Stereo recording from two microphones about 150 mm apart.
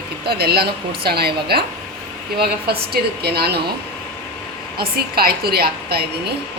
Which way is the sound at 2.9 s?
90° right.